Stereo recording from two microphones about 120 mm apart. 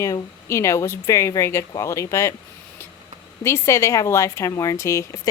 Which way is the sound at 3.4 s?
25° left (ahead or behind).